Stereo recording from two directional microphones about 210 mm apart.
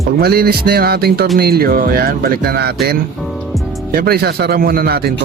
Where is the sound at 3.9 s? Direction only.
50° right (ahead or behind).